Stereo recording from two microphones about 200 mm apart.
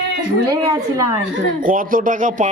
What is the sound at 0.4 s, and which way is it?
Speech, 20° right (ahead or behind).